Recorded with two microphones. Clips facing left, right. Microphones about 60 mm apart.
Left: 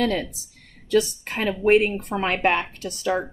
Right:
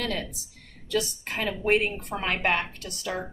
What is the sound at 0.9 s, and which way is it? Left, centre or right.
A woman's voice, left.